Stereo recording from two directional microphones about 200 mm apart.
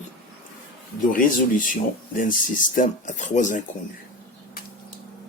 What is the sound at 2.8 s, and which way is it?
Speech, 40° left (ahead or behind).